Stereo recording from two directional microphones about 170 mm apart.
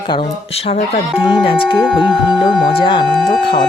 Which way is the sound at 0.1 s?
35° left (ahead or behind).